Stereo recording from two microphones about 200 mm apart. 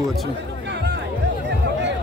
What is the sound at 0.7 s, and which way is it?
Music, 60° right (ahead or behind).